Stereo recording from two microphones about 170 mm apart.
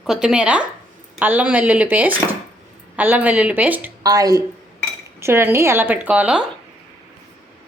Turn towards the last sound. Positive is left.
turn(degrees=-5)  # may be behind; listen again after turning